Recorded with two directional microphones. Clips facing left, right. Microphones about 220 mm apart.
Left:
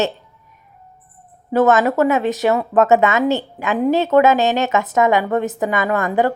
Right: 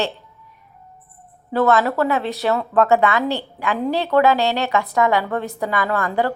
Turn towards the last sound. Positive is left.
turn(degrees=20)  # may be behind; listen again after turning